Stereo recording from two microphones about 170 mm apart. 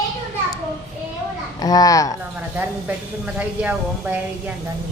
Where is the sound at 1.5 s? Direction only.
20° left (ahead or behind).